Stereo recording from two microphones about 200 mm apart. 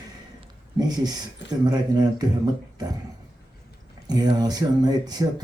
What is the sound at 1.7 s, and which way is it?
Speech, 20° right (ahead or behind).